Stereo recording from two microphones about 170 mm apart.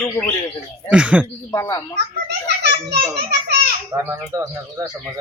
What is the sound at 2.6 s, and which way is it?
A child's voice, 80° right.